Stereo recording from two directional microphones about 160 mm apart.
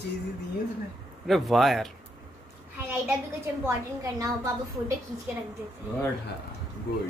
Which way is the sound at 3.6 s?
20° right (ahead or behind).